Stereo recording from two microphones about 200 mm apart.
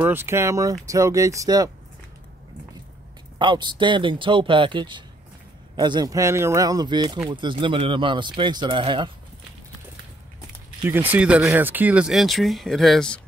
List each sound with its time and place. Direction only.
0.0 s speech: 10° right (ahead or behind)
3.3 s speech: 20° right (ahead or behind)
10.8 s speech: 10° right (ahead or behind)